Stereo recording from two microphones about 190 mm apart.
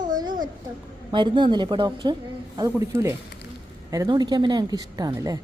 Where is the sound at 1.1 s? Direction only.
25° right (ahead or behind).